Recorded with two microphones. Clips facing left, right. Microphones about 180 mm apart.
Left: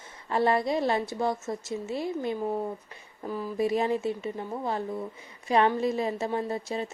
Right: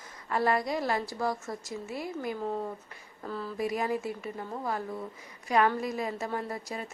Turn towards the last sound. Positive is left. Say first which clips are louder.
# left 6 dB
turn(degrees=25)  # may be behind; listen again after turning